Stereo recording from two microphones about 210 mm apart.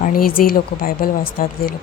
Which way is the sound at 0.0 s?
45° left (ahead or behind).